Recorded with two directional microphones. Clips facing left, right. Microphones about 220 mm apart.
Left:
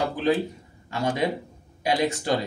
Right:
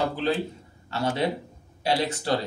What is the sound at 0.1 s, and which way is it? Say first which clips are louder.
Speech: left 3 dB; 15° left (ahead or behind).